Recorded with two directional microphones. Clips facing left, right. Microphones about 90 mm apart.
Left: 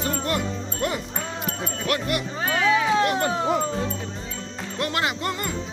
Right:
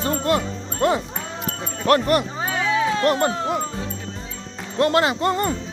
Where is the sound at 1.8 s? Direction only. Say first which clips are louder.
Right 9 dB; 40° right (ahead or behind).